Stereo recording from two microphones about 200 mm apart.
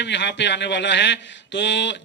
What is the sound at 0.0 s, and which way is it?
Speech, 60° left (ahead or behind).